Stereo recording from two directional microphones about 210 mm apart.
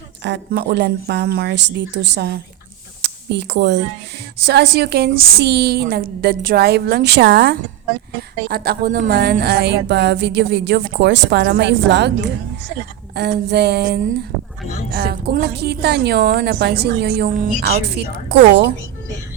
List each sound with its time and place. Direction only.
0.2 s speech: 55° right (ahead or behind)
3.0 s a sound: 55° right (ahead or behind)
4.4 s a woman's voice: 50° right (ahead or behind)